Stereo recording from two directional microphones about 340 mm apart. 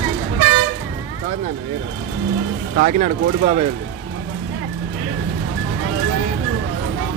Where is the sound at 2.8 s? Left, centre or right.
Right.